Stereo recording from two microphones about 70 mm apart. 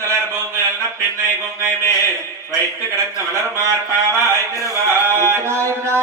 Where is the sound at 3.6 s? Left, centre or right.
Right.